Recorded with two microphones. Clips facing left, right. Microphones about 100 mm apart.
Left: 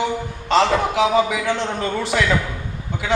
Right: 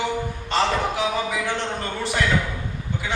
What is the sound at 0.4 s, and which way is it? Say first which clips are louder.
A man's voice: left 6 dB; 90° left.